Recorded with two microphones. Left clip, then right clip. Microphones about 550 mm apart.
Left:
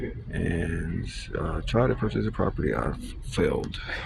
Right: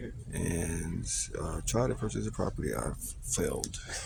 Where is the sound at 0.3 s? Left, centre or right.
Right.